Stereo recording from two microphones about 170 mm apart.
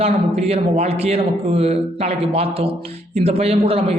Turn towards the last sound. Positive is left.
turn(degrees=-35)  # may be behind; listen again after turning